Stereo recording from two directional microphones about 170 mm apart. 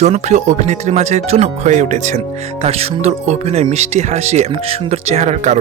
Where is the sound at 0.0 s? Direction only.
40° right (ahead or behind).